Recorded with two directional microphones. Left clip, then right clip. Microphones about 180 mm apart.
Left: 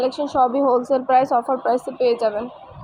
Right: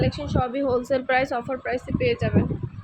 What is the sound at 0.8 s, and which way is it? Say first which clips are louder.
Speech: left 5 dB; 15° right (ahead or behind).